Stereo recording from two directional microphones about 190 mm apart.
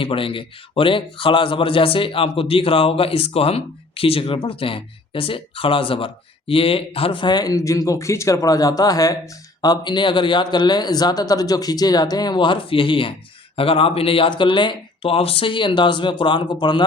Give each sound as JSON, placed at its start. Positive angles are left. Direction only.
{"t": 0.0, "sound": "speech", "side_deg": 30}